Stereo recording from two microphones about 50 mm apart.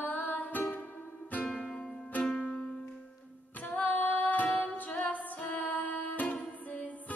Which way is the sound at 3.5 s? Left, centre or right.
Left.